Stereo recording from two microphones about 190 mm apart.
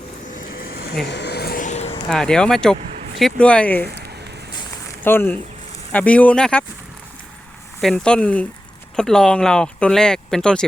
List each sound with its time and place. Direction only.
0.3 s a sound: 45° left (ahead or behind)
2.0 s speech: 5° left (ahead or behind)
2.7 s vehicle: 35° right (ahead or behind)
3.2 s speech: 5° left (ahead or behind)
4.9 s speech: 10° left (ahead or behind)
7.8 s speech: centre (ahead or behind)